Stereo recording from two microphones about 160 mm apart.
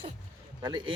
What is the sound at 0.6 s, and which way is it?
Speech, 25° right (ahead or behind).